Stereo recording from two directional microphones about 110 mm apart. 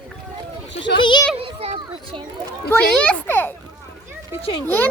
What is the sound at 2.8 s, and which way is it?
Speech, 10° left (ahead or behind).